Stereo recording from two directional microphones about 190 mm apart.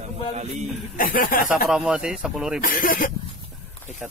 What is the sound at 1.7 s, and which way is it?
Speech, 5° right (ahead or behind).